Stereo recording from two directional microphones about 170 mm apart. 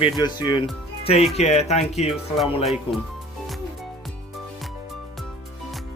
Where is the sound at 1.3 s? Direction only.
40° left (ahead or behind).